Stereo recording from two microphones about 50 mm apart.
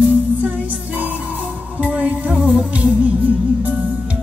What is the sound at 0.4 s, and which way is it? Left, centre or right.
Music, right.